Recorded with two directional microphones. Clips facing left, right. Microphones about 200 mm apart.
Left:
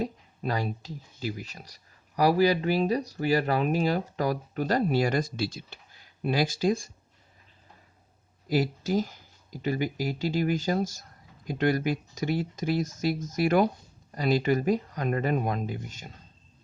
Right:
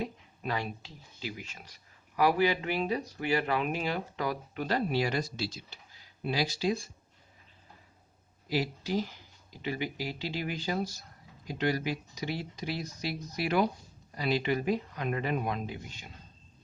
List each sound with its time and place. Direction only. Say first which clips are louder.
0.0 s speech: left 5 dB; 40° left (ahead or behind)
8.4 s speech: left 5 dB; 45° left (ahead or behind)